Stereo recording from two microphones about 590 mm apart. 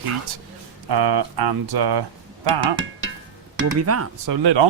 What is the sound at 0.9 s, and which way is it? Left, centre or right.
Speech, right.